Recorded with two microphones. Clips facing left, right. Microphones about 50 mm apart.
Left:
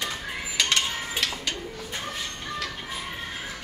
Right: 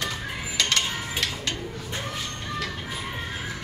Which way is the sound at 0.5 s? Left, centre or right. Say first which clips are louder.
Even; left.